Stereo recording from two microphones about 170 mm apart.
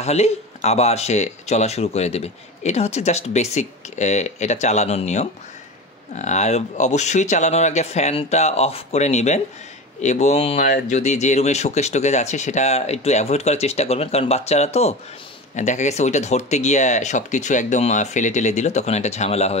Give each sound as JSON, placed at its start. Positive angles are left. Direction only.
{"t": 0.0, "sound": "speech", "side_deg": 40}